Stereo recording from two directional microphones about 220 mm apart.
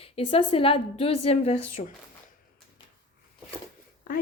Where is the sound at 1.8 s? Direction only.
40° left (ahead or behind).